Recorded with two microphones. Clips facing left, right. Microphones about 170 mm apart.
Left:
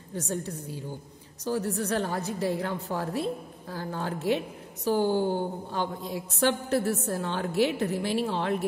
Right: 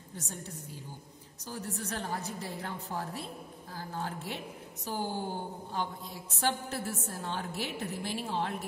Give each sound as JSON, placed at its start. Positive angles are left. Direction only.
{"t": 1.4, "sound": "a woman's voice", "side_deg": 75}
{"t": 4.8, "sound": "a woman's voice", "side_deg": 80}